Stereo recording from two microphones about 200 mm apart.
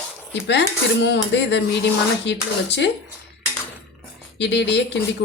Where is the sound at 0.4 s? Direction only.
60° left (ahead or behind).